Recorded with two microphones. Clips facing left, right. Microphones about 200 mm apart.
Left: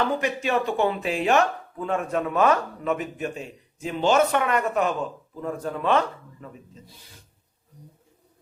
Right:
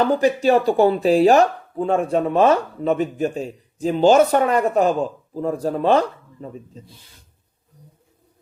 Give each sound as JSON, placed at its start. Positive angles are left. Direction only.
{"t": 0.0, "sound": "speech", "side_deg": -35}